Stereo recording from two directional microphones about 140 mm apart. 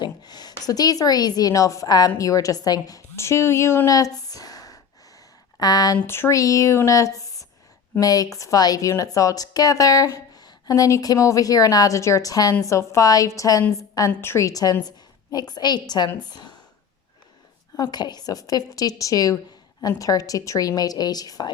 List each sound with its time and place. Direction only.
0.0 s a woman's voice: 30° left (ahead or behind)
6.0 s speech: 15° left (ahead or behind)
17.7 s speech: 30° left (ahead or behind)